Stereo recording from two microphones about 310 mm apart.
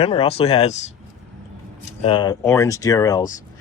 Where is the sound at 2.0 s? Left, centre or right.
Centre.